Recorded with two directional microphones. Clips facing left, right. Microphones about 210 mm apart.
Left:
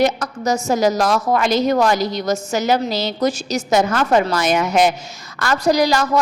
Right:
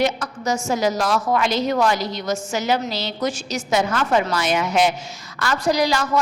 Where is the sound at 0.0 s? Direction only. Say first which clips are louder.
Left 4 dB; 40° left (ahead or behind).